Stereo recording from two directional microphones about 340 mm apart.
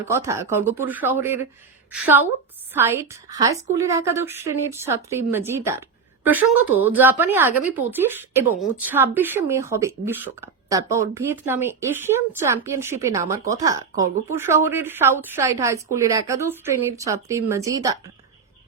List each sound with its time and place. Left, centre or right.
0.1 s a woman's voice: centre